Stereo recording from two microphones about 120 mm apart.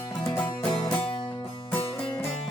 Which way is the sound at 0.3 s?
10° left (ahead or behind).